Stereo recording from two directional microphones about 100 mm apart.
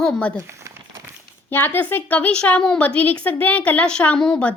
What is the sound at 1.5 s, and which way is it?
A woman's voice, 20° left (ahead or behind).